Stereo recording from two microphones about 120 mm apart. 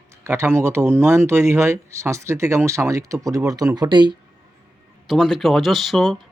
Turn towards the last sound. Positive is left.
turn(degrees=0)  # may be behind; listen again after turning